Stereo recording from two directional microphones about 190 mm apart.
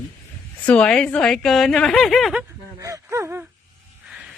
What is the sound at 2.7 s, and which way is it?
Speech, 15° right (ahead or behind).